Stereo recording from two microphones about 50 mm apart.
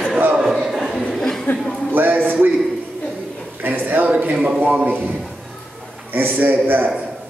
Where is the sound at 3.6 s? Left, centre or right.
Right.